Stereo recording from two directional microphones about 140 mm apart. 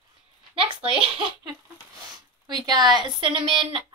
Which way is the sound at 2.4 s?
30° right (ahead or behind).